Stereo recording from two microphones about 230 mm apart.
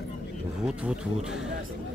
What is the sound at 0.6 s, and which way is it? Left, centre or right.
Speech, centre.